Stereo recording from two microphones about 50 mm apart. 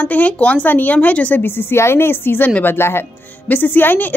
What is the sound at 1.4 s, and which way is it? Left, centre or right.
Speech, left.